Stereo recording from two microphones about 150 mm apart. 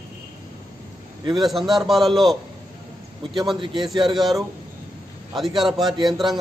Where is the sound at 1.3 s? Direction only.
Centre (ahead or behind).